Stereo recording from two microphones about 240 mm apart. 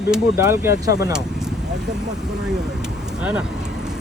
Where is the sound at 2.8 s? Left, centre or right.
Centre.